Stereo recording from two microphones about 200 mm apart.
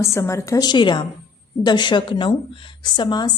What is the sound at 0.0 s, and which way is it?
A woman's voice, 15° left (ahead or behind).